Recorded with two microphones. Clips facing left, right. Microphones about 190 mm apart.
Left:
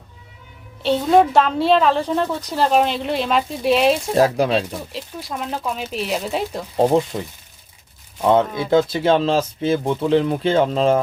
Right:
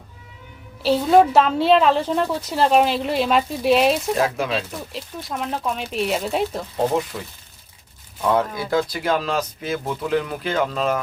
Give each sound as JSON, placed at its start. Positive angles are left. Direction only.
{"t": 0.8, "sound": "a woman's voice", "side_deg": -5}
{"t": 4.1, "sound": "speech", "side_deg": 35}
{"t": 4.9, "sound": "a woman's voice", "side_deg": 0}
{"t": 7.1, "sound": "speech", "side_deg": 25}